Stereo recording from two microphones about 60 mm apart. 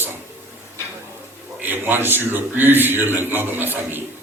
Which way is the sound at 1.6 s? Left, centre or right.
Right.